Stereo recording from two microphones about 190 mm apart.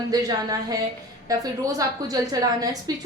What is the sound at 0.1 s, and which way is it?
A woman's voice, 20° right (ahead or behind).